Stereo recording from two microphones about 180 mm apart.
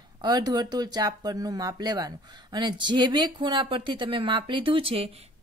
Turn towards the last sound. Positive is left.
turn(degrees=-30)  # may be behind; listen again after turning